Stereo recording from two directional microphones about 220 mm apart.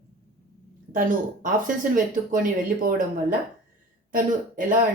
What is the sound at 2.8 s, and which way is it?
Speech, 40° right (ahead or behind).